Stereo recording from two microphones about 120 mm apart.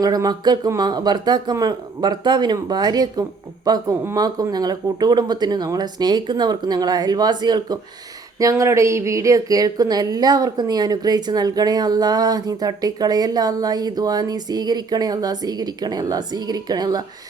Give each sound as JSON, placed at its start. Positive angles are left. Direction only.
{"t": 0.0, "sound": "speech", "side_deg": -30}